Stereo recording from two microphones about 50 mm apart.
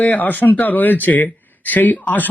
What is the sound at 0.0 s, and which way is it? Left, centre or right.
Speech, left.